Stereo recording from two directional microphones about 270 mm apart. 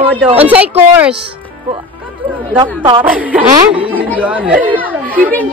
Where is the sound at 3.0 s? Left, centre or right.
Centre.